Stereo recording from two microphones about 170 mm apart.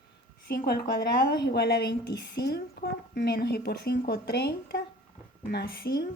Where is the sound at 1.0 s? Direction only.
75° left (ahead or behind).